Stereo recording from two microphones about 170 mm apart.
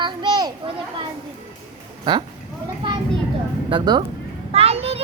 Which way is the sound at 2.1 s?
25° right (ahead or behind).